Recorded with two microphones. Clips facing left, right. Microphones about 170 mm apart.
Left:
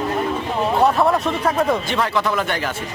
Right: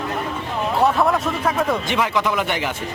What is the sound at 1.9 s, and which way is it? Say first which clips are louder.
Speech: even; 15° right (ahead or behind).